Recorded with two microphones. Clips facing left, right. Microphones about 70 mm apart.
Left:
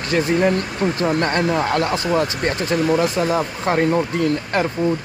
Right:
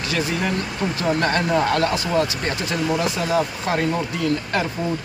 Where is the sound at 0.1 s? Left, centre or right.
Left.